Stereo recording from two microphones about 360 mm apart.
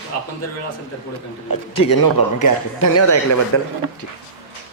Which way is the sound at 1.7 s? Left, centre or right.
Left.